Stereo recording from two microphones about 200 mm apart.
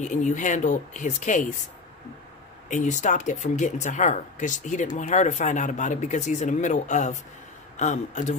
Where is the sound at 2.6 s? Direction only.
40° left (ahead or behind).